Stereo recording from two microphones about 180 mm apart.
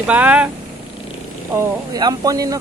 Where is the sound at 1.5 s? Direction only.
20° right (ahead or behind).